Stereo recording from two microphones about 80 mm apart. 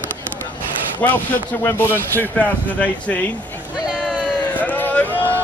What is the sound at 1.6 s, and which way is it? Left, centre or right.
Speech, left.